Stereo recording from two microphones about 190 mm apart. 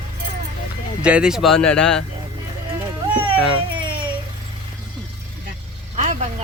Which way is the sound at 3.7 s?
25° right (ahead or behind).